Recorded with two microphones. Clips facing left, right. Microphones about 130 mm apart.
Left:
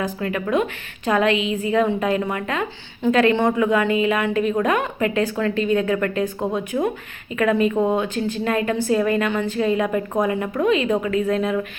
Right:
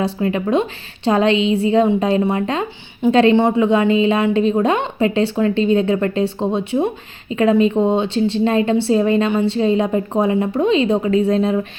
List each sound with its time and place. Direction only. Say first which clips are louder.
0.0 s a woman's voice: right 5 dB; 25° right (ahead or behind)